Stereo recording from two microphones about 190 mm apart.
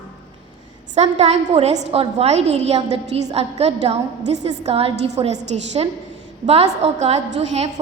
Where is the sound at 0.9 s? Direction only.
35° right (ahead or behind).